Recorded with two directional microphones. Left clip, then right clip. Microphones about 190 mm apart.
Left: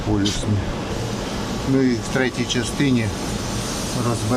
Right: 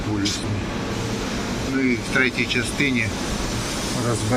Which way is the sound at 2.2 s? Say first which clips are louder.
Right 2 dB; 30° left (ahead or behind).